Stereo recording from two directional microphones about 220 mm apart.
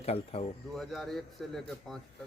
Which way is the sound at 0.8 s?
Centre (ahead or behind).